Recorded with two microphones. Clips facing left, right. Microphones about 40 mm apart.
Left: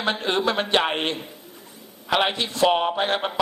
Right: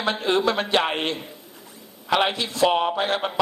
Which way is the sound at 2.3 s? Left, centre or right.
Left.